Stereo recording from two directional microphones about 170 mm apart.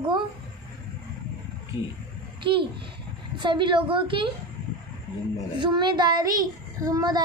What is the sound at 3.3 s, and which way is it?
Speech, 30° right (ahead or behind).